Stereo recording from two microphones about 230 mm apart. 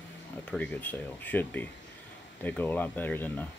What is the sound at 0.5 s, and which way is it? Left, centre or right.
Speech, centre.